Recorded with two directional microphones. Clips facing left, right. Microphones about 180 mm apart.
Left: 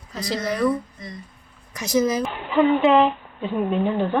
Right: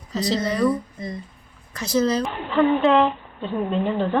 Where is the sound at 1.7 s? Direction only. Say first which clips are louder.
Even; 15° left (ahead or behind).